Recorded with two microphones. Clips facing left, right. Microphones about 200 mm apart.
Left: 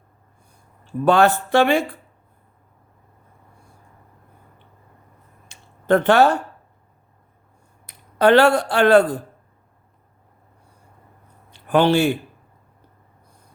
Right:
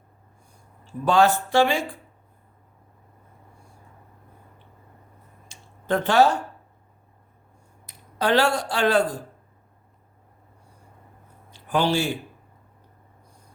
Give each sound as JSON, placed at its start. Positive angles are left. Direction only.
{"t": 1.0, "sound": "speech", "side_deg": 60}
{"t": 5.5, "sound": "a sound", "side_deg": 60}
{"t": 7.9, "sound": "speech", "side_deg": 60}
{"t": 11.5, "sound": "a man's voice", "side_deg": 60}